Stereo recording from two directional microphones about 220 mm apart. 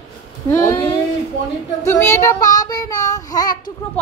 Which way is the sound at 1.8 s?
10° left (ahead or behind).